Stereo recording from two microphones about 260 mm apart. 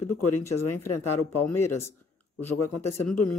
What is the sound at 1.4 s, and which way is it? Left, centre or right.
Speech, centre.